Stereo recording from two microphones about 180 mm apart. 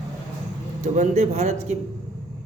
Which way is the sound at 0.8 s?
40° right (ahead or behind).